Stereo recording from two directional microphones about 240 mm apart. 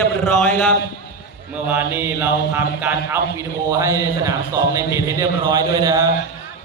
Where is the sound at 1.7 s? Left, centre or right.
Centre.